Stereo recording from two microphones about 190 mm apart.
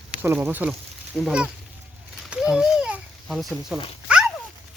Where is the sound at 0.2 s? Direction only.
10° right (ahead or behind).